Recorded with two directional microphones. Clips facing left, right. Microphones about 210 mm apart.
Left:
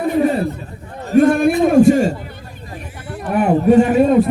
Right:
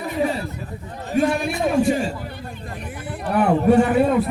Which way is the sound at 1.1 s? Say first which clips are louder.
Left 9 dB; 50° left (ahead or behind).